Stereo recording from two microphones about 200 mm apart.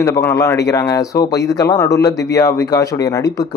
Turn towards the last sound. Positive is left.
turn(degrees=20)  # may be behind; listen again after turning